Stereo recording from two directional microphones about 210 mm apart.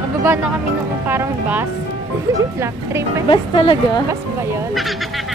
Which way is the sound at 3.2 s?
25° left (ahead or behind).